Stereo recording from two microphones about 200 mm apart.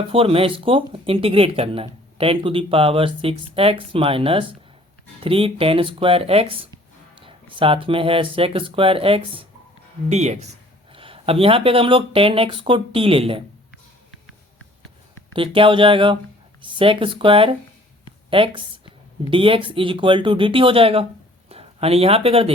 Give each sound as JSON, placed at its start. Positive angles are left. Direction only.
{"t": 0.1, "sound": "speech", "side_deg": -30}
{"t": 15.3, "sound": "a woman's voice", "side_deg": -25}